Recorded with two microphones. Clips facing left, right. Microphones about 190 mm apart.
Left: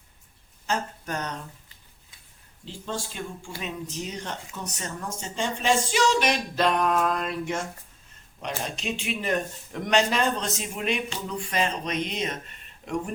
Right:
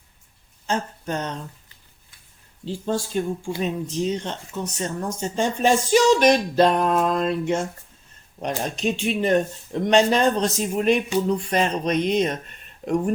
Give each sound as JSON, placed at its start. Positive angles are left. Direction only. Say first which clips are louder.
{"t": 0.7, "sound": "speech", "louder": "right 4 dB", "side_deg": -25}
{"t": 2.6, "sound": "speech", "louder": "right 8 dB", "side_deg": -35}
{"t": 5.2, "sound": "speech", "louder": "right 6 dB", "side_deg": -45}
{"t": 8.4, "sound": "speech", "louder": "right 6 dB", "side_deg": -45}